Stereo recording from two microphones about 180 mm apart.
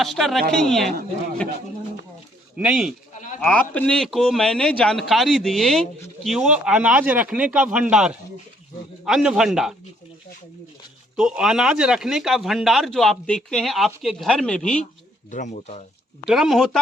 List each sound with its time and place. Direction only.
0.0 s speech: centre (ahead or behind)
2.6 s speech: 5° right (ahead or behind)
3.4 s speech: 10° left (ahead or behind)
11.2 s speech: 5° right (ahead or behind)
15.3 s speech: 45° left (ahead or behind)
16.2 s speech: centre (ahead or behind)